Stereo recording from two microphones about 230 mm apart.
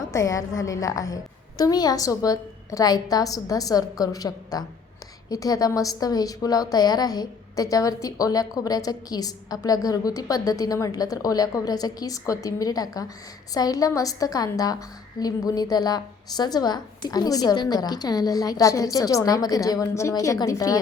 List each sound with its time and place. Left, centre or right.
0.1 s a woman's voice: centre